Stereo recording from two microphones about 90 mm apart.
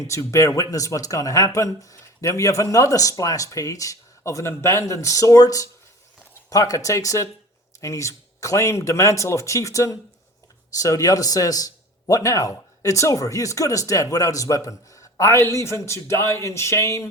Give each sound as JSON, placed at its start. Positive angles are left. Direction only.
{"t": 0.0, "sound": "speech", "side_deg": 35}